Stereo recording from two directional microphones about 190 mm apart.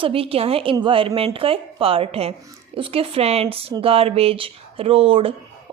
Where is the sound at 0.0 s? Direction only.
30° right (ahead or behind).